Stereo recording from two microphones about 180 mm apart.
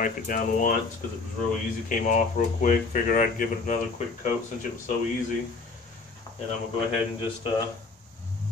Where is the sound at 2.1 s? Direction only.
45° left (ahead or behind).